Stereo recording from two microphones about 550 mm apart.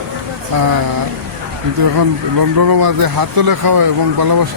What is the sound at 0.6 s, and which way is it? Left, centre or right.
Speech, right.